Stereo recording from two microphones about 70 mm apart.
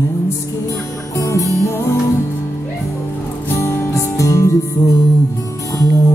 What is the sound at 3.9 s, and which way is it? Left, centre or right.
Music, left.